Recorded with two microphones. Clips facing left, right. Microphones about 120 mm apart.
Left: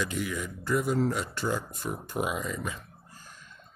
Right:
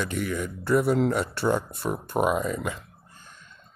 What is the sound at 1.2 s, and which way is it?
Speech, 60° right (ahead or behind).